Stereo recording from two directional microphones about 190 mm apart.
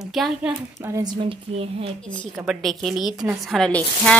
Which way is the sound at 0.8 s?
20° right (ahead or behind).